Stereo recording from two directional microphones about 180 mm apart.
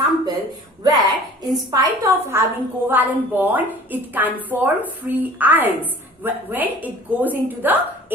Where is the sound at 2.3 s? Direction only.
15° right (ahead or behind).